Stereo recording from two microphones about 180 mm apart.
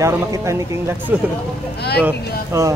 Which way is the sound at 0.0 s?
15° right (ahead or behind).